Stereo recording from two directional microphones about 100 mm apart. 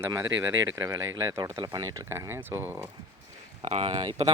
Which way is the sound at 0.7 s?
30° right (ahead or behind).